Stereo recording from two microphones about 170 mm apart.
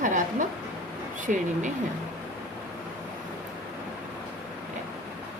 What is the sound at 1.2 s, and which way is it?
Speech, 50° right (ahead or behind).